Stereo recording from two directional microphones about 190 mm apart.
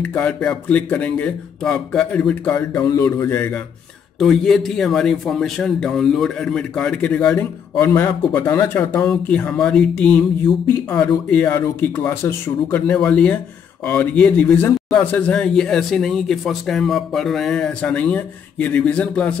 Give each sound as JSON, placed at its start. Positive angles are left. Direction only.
{"t": 0.0, "sound": "speech", "side_deg": 5}
{"t": 2.8, "sound": "a man's voice", "side_deg": 20}